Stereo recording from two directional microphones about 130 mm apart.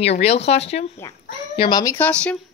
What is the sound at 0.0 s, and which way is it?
Speech, 50° left (ahead or behind).